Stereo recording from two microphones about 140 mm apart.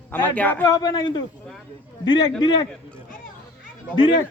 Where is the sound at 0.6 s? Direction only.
30° left (ahead or behind).